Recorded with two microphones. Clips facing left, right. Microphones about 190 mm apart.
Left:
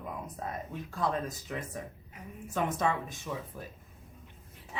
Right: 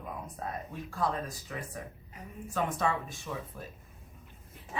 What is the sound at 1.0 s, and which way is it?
Speech, 25° left (ahead or behind).